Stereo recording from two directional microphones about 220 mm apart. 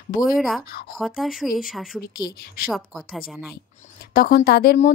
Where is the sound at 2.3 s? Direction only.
40° left (ahead or behind).